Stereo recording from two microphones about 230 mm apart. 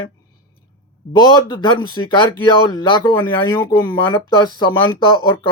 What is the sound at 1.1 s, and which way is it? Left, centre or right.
Speech, centre.